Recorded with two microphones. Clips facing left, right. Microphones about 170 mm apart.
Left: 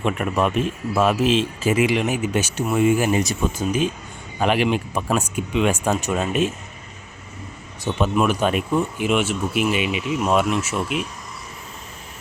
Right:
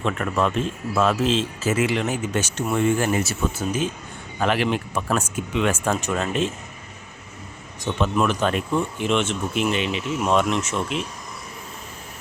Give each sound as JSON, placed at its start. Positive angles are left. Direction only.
{"t": 0.0, "sound": "speech", "side_deg": 15}
{"t": 7.9, "sound": "speech", "side_deg": 10}